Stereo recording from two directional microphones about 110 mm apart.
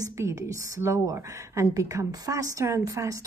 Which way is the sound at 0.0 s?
30° right (ahead or behind).